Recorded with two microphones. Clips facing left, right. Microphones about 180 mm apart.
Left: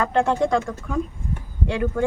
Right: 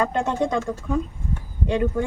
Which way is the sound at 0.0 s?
15° right (ahead or behind).